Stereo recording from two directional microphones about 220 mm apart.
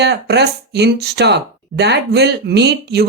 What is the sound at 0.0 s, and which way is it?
Speech, 50° right (ahead or behind).